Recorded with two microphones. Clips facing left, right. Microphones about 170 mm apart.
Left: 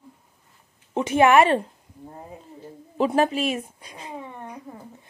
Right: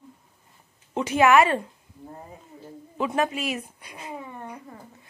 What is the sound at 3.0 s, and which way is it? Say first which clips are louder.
A woman's voice: left 5 dB; 35° left (ahead or behind).